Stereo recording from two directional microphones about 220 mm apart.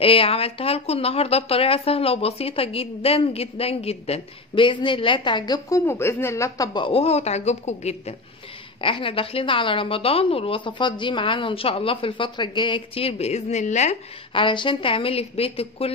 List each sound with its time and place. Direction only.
0.0 s a woman's voice: 25° left (ahead or behind)